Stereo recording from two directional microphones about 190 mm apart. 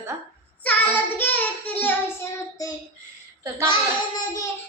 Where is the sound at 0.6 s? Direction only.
10° left (ahead or behind).